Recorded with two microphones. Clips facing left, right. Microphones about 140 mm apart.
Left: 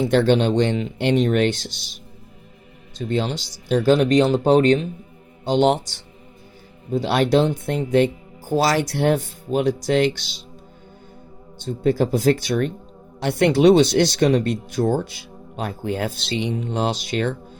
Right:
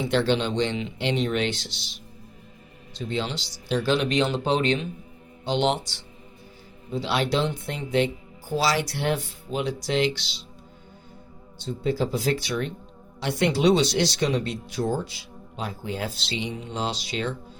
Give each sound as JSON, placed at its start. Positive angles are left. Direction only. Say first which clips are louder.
{"t": 0.0, "sound": "speech", "louder": "left 6 dB", "side_deg": 50}
{"t": 3.1, "sound": "speech", "louder": "left 6 dB", "side_deg": 50}
{"t": 11.6, "sound": "speech", "louder": "left 6 dB", "side_deg": 55}